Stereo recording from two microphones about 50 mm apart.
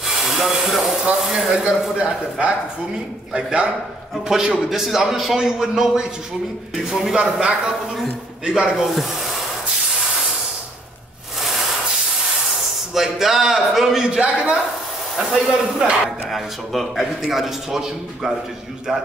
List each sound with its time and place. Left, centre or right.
0.0 s a sound: centre
1.2 s a man's voice: centre
2.0 s a man's voice: right
7.2 s a man's voice: centre
8.7 s speech: centre
12.5 s speech: centre
15.1 s a man's voice: centre
16.3 s a man's voice: centre